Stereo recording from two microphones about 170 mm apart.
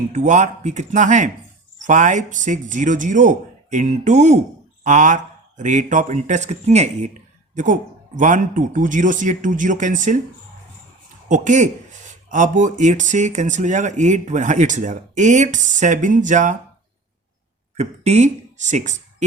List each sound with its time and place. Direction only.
0.1 s a man's voice: 45° right (ahead or behind)
11.3 s a man's voice: 45° right (ahead or behind)
17.7 s speech: 40° right (ahead or behind)